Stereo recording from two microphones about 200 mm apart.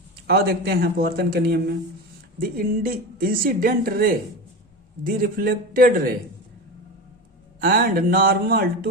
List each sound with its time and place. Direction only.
0.3 s speech: 50° right (ahead or behind)
7.6 s speech: 45° right (ahead or behind)